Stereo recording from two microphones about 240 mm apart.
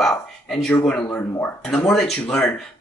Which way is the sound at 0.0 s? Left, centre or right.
Centre.